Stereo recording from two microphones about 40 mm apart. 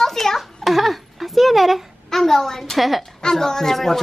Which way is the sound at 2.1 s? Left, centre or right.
Centre.